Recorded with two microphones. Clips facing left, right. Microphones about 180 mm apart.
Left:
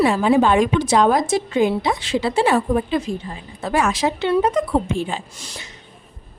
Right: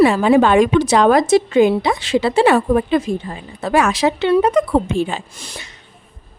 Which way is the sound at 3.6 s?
75° right (ahead or behind).